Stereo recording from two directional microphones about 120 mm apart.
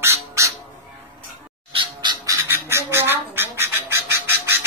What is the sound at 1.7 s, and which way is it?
Bird, 40° right (ahead or behind).